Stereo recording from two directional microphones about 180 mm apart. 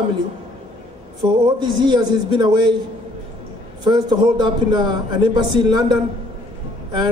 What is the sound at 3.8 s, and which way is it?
A man's voice, 25° right (ahead or behind).